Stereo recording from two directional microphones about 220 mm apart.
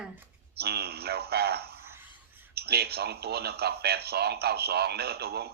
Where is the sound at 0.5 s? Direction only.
45° right (ahead or behind).